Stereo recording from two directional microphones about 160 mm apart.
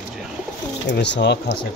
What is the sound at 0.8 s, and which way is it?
Speech, 90° left.